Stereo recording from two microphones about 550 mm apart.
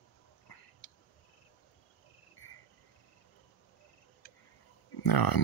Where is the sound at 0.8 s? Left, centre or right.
Centre.